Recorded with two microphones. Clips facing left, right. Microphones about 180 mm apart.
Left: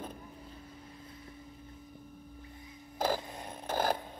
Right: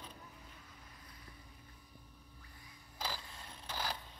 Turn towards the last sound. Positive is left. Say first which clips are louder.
# left 11 dB
turn(degrees=50)  # may be behind; listen again after turning